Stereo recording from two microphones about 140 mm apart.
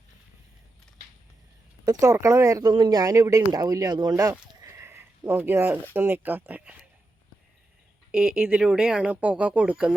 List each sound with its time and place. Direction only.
1.8 s speech: 25° right (ahead or behind)
8.1 s speech: 5° right (ahead or behind)